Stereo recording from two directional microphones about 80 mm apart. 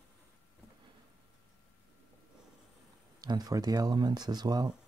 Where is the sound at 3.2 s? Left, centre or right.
Right.